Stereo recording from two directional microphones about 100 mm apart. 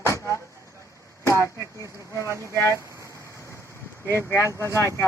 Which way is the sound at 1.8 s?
30° right (ahead or behind).